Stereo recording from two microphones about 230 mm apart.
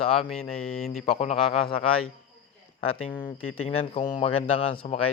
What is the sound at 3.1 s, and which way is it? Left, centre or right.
Speech, centre.